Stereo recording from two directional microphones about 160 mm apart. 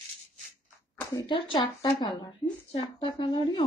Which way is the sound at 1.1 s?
30° left (ahead or behind).